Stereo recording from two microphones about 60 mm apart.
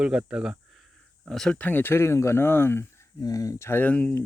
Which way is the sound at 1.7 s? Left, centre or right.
Left.